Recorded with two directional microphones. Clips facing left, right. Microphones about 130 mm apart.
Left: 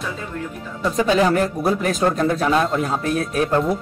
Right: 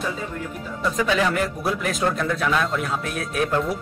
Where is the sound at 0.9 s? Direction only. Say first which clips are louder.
Left 5 dB; 35° left (ahead or behind).